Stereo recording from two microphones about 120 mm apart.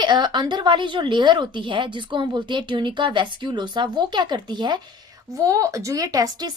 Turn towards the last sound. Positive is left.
turn(degrees=-30)  # may be behind; listen again after turning